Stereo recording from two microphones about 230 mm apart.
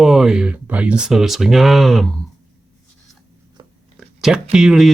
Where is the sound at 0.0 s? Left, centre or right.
Centre.